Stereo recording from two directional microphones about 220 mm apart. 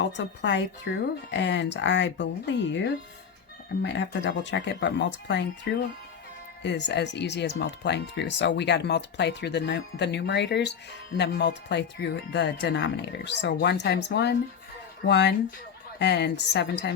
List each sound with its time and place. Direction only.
0.2 s speech: 55° left (ahead or behind)
3.8 s speech: 55° left (ahead or behind)
6.6 s speech: 50° left (ahead or behind)